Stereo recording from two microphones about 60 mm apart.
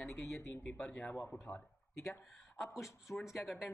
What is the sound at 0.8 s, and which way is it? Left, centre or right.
Speech, left.